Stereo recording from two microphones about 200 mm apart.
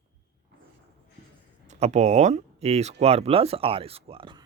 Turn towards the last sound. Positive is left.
turn(degrees=-25)  # may be behind; listen again after turning